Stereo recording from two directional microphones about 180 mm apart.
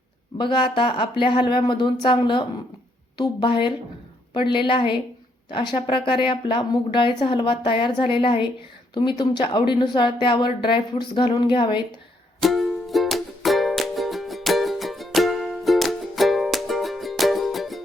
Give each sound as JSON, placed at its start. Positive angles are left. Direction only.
{"t": 0.3, "sound": "speech", "side_deg": 25}
{"t": 12.4, "sound": "music", "side_deg": 0}